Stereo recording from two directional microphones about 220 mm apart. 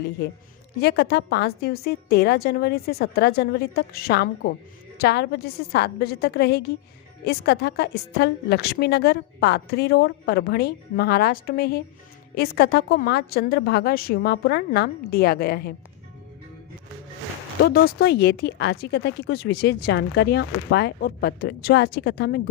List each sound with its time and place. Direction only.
0.8 s speech: 50° left (ahead or behind)
17.6 s speech: 45° left (ahead or behind)